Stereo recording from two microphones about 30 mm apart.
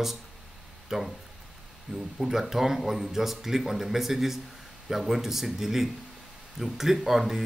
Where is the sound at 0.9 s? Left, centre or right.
Centre.